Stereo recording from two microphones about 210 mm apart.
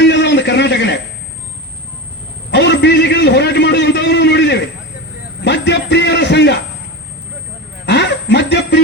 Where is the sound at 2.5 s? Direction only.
55° left (ahead or behind).